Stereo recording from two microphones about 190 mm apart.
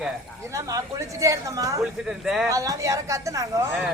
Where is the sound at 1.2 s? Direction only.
15° right (ahead or behind).